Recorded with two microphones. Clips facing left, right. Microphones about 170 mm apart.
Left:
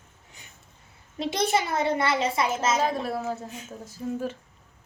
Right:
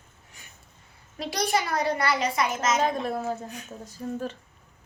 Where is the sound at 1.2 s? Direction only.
25° left (ahead or behind).